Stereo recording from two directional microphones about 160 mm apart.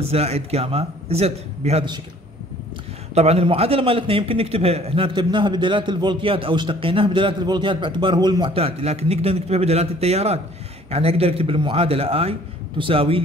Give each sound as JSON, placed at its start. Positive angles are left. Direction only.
{"t": 0.0, "sound": "a man's voice", "side_deg": -40}
{"t": 3.2, "sound": "a man's voice", "side_deg": -40}